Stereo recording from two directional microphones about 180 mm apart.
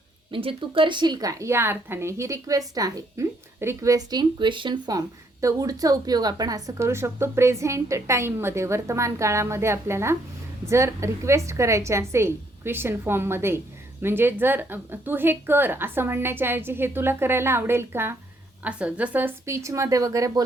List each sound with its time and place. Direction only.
0.3 s a woman's voice: 30° right (ahead or behind)